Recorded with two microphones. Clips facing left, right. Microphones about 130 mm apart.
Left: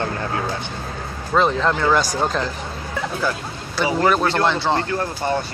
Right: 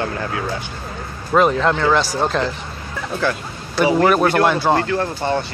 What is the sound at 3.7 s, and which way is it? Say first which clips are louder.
Speech: right 4 dB; 20° right (ahead or behind).